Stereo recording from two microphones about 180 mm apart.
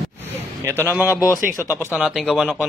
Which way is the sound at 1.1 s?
20° left (ahead or behind).